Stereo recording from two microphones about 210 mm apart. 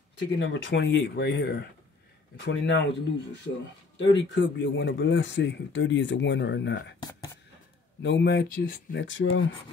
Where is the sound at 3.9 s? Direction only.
60° left (ahead or behind).